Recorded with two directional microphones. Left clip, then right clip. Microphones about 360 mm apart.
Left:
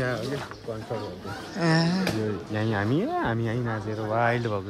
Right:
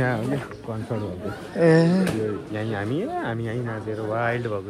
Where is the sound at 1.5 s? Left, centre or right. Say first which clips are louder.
Right 8 dB; centre.